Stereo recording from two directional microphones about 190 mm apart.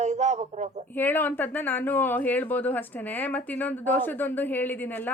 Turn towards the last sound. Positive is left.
turn(degrees=10)  # may be behind; listen again after turning